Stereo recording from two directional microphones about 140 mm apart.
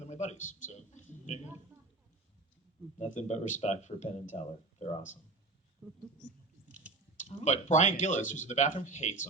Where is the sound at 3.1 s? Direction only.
55° left (ahead or behind).